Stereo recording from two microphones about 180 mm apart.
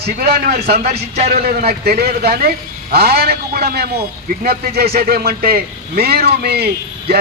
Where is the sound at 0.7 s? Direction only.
35° right (ahead or behind).